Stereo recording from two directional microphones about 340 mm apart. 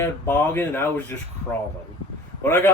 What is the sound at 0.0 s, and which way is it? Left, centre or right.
Speech, centre.